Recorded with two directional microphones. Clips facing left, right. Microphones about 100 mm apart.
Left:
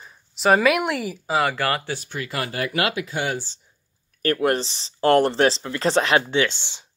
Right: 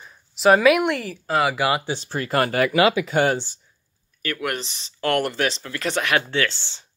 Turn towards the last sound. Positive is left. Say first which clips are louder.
# left 2 dB
turn(degrees=15)  # may be behind; listen again after turning